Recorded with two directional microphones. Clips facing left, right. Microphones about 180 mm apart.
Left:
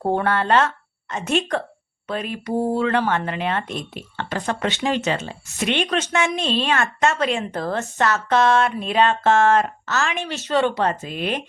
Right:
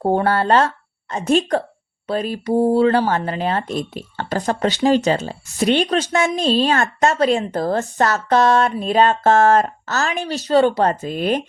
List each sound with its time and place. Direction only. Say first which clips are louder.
0.0 s speech: right 3 dB; 30° right (ahead or behind)